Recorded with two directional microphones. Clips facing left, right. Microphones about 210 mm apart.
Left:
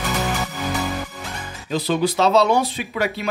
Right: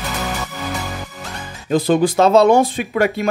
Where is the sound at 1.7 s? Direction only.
50° right (ahead or behind).